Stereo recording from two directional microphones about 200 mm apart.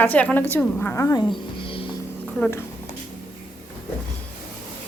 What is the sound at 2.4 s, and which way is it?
Speech, 10° left (ahead or behind).